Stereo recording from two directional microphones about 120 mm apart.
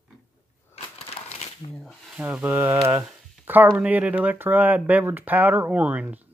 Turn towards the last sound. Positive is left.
turn(degrees=-10)  # may be behind; listen again after turning